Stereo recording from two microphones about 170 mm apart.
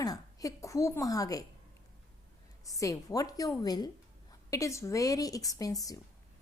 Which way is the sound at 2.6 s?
20° left (ahead or behind).